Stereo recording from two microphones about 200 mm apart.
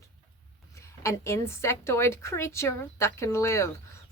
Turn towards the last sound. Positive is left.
turn(degrees=15)  # may be behind; listen again after turning